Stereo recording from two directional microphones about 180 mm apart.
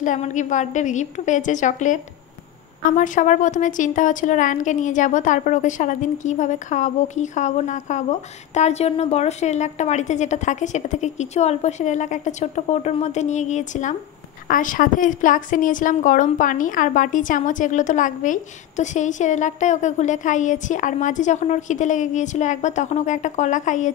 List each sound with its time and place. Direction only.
0.0 s a woman's voice: 45° left (ahead or behind)